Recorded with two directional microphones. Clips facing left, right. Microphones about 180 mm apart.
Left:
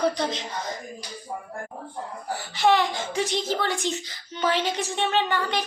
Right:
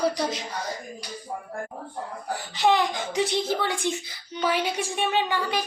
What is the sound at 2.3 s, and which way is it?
A woman's voice, 15° right (ahead or behind).